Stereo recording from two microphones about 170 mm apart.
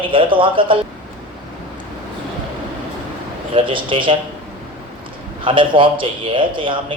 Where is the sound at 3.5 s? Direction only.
30° right (ahead or behind).